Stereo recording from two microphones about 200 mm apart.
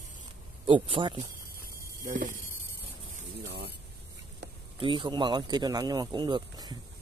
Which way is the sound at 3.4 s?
55° right (ahead or behind).